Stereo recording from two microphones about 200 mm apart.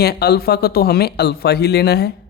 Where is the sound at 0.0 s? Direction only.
50° left (ahead or behind).